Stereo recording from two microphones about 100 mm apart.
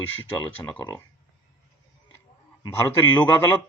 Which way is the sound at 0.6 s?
40° left (ahead or behind).